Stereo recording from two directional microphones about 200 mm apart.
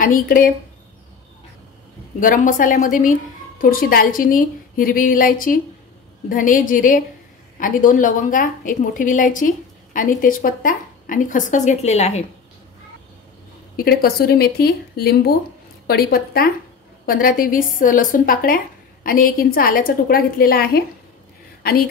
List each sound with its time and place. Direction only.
0.0 s a woman's voice: 45° left (ahead or behind)
2.1 s a woman's voice: 40° left (ahead or behind)
13.7 s a woman's voice: 50° left (ahead or behind)